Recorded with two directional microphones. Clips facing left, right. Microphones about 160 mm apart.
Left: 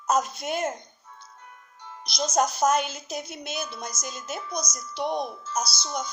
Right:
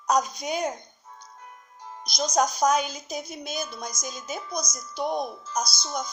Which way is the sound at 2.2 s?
5° left (ahead or behind).